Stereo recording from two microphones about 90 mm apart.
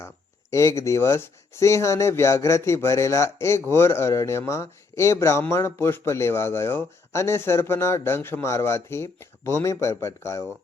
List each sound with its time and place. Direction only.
0.5 s speech: 35° left (ahead or behind)